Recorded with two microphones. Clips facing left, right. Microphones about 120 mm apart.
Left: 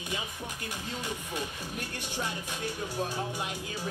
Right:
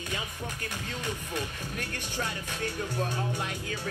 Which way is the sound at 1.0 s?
15° left (ahead or behind).